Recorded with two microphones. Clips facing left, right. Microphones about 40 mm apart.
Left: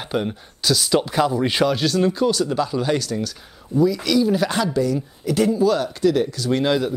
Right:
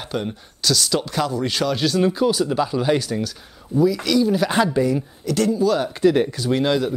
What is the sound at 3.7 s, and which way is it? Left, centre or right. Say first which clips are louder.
Speech: even; centre.